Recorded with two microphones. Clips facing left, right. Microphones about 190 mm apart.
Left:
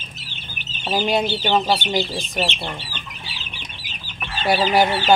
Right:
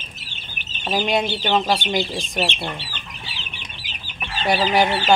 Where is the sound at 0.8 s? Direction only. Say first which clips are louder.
Left 1 dB; 5° left (ahead or behind).